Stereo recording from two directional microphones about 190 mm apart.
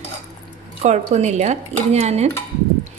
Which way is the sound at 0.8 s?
35° right (ahead or behind).